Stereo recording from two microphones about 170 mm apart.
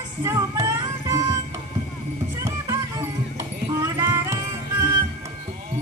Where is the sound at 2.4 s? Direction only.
15° right (ahead or behind).